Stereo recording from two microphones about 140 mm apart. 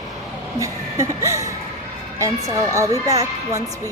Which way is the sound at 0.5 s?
20° right (ahead or behind).